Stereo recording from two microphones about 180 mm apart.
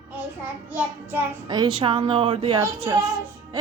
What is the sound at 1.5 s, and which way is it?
A woman's voice, 25° right (ahead or behind).